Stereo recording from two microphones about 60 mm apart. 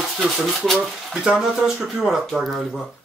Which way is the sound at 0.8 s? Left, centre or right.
Centre.